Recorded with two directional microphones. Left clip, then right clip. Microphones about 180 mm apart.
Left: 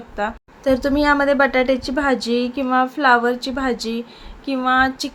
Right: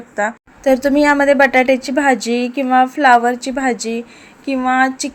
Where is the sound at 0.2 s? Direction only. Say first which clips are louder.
Right 5 dB; 20° right (ahead or behind).